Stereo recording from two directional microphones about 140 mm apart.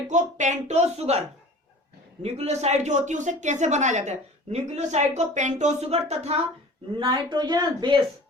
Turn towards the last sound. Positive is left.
turn(degrees=-30)  # may be behind; listen again after turning